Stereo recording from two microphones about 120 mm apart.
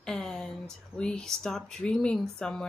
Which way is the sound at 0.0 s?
5° left (ahead or behind).